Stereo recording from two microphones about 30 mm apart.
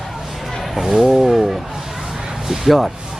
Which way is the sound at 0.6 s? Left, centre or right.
Centre.